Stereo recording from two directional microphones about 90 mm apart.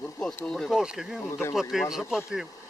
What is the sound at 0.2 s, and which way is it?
Speech, 5° left (ahead or behind).